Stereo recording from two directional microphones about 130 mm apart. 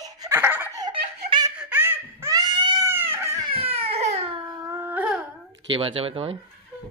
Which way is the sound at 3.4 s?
50° right (ahead or behind).